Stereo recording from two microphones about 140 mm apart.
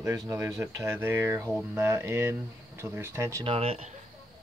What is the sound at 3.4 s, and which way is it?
Speech, 45° right (ahead or behind).